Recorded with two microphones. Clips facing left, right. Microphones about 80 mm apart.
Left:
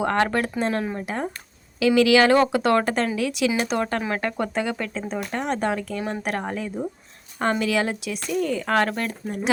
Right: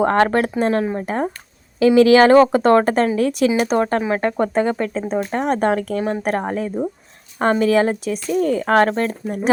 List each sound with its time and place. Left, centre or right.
0.0 s speech: right